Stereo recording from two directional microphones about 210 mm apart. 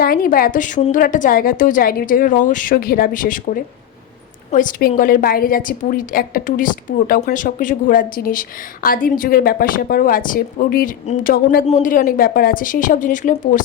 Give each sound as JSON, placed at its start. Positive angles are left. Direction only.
{"t": 0.0, "sound": "a woman's voice", "side_deg": 45}